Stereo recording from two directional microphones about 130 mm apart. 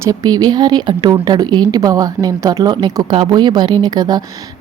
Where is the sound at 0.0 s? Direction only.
30° right (ahead or behind).